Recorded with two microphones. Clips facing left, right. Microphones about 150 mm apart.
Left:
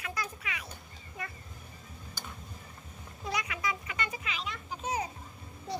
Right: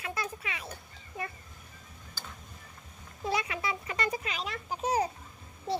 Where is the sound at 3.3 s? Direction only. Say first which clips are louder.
Right 3 dB; 30° right (ahead or behind).